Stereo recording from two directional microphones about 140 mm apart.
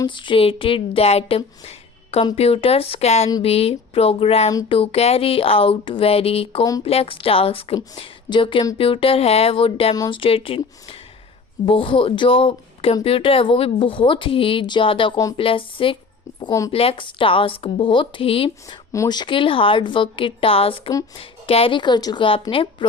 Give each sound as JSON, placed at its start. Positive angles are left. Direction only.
{"t": 0.0, "sound": "speech", "side_deg": 35}
{"t": 1.6, "sound": "a sound", "side_deg": 45}
{"t": 2.3, "sound": "speech", "side_deg": 45}
{"t": 9.9, "sound": "speech", "side_deg": 30}
{"t": 16.4, "sound": "speech", "side_deg": 25}
{"t": 16.7, "sound": "speech", "side_deg": 40}